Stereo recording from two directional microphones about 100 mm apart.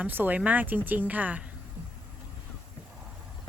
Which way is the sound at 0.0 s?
20° right (ahead or behind).